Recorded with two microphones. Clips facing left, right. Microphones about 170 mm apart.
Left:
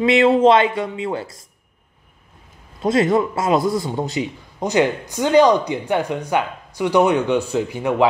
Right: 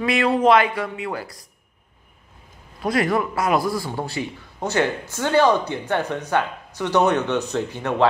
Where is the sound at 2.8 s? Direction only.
25° left (ahead or behind).